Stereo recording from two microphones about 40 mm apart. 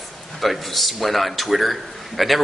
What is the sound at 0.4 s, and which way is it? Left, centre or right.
A man's voice, centre.